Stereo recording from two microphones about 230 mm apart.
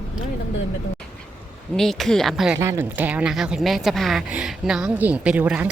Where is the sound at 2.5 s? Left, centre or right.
Centre.